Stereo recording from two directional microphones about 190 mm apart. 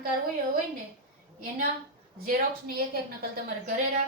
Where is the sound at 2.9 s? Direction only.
50° right (ahead or behind).